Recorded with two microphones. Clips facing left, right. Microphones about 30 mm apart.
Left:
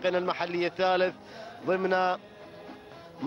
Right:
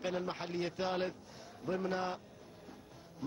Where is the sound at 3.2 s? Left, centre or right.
Left.